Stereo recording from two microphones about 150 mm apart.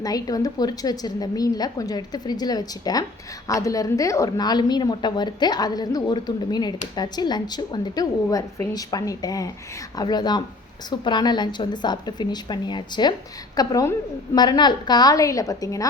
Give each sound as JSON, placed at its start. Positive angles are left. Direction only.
{"t": 0.0, "sound": "a woman's voice", "side_deg": 25}